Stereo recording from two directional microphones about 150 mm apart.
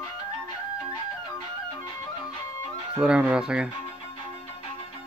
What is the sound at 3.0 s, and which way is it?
Speech, 5° right (ahead or behind).